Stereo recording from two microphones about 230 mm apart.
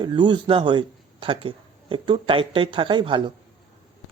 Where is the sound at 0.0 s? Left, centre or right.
Centre.